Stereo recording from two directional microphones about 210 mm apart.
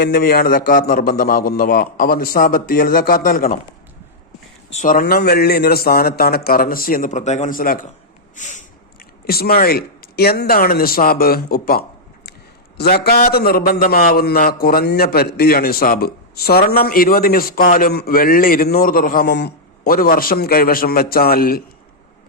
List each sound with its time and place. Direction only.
0.0 s a man's voice: 45° left (ahead or behind)
4.7 s a man's voice: 40° left (ahead or behind)
8.4 s snort: 35° left (ahead or behind)
9.2 s a man's voice: 45° left (ahead or behind)